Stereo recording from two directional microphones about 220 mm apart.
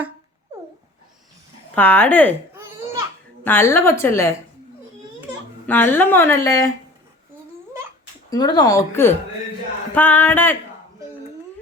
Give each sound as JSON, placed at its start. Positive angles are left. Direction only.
{"t": 1.7, "sound": "a woman's voice", "side_deg": 10}
{"t": 3.4, "sound": "a woman's voice", "side_deg": 10}
{"t": 5.6, "sound": "a woman's voice", "side_deg": 10}
{"t": 8.3, "sound": "a woman's voice", "side_deg": 20}